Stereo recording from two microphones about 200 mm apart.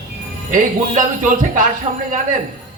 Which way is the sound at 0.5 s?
40° right (ahead or behind).